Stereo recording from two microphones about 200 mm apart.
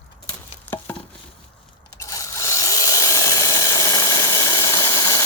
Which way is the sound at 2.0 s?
15° left (ahead or behind).